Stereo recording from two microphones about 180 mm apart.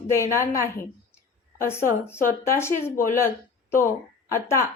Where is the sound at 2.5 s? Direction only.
15° left (ahead or behind).